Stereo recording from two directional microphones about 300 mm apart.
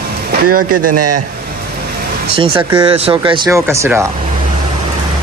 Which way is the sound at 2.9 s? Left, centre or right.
Centre.